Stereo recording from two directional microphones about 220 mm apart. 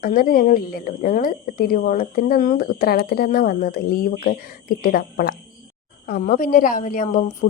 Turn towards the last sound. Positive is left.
turn(degrees=35)  # may be behind; listen again after turning